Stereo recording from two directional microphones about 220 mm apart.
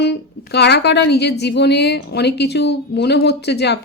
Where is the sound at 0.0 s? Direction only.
50° left (ahead or behind).